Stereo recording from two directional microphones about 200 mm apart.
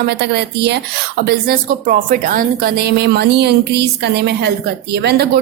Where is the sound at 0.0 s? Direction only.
55° right (ahead or behind).